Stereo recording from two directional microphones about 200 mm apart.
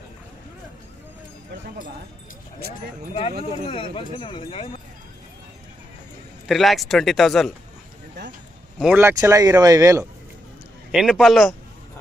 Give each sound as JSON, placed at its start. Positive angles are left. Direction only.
{"t": 3.5, "sound": "speech", "side_deg": 25}
{"t": 6.5, "sound": "speech", "side_deg": 0}
{"t": 8.8, "sound": "speech", "side_deg": -10}
{"t": 10.9, "sound": "speech", "side_deg": 0}